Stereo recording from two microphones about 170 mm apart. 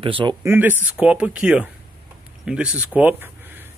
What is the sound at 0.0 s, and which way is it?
Speech, 30° right (ahead or behind).